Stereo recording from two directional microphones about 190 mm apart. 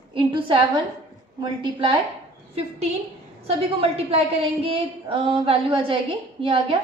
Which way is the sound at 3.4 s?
30° right (ahead or behind).